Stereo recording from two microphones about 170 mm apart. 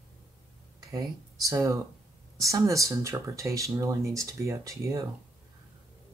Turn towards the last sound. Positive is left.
turn(degrees=-20)  # may be behind; listen again after turning